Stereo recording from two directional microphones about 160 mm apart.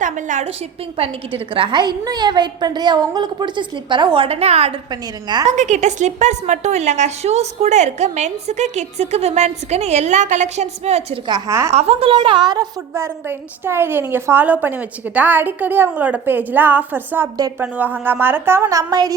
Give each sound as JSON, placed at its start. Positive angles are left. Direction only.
{"t": 0.0, "sound": "a sound", "side_deg": -50}
{"t": 0.9, "sound": "a woman's voice", "side_deg": -35}
{"t": 4.9, "sound": "a woman's voice", "side_deg": -25}
{"t": 5.5, "sound": "a woman's voice", "side_deg": -50}
{"t": 11.3, "sound": "a woman's voice", "side_deg": -25}
{"t": 11.7, "sound": "a woman's voice", "side_deg": -40}